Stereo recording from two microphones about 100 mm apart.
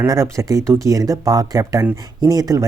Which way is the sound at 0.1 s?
30° right (ahead or behind).